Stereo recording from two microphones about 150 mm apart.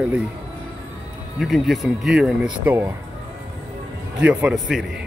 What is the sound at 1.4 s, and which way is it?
Speech, centre (ahead or behind).